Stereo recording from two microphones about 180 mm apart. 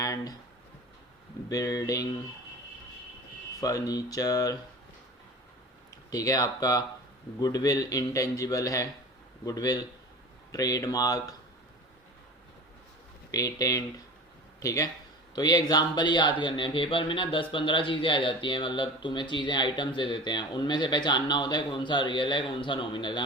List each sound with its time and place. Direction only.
0.0 s a sound: 20° left (ahead or behind)
1.5 s speech: 20° left (ahead or behind)
3.6 s speech: 20° left (ahead or behind)
6.1 s speech: 20° left (ahead or behind)
13.3 s speech: 20° left (ahead or behind)